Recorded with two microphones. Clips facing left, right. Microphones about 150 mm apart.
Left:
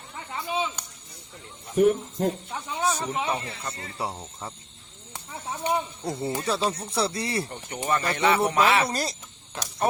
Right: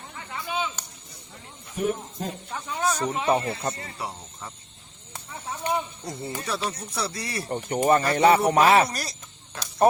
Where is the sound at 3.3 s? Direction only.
35° right (ahead or behind).